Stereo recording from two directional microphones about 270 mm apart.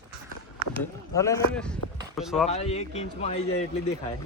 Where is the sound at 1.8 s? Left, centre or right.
Left.